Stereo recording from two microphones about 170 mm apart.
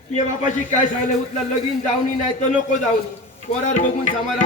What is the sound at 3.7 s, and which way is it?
Speech, 45° left (ahead or behind).